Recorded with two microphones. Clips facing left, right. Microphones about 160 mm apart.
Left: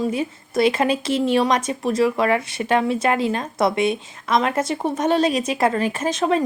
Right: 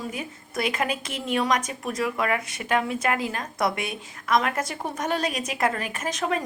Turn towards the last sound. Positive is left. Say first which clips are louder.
# left 7 dB
turn(degrees=30)  # may be behind; listen again after turning